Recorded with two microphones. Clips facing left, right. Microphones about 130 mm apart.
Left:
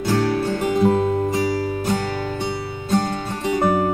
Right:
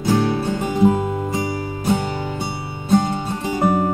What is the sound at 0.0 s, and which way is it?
Music, 15° right (ahead or behind).